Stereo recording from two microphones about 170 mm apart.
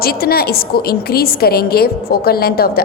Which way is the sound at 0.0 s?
60° left (ahead or behind).